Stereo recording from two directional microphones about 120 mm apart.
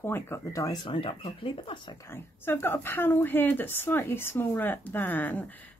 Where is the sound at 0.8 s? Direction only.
50° left (ahead or behind).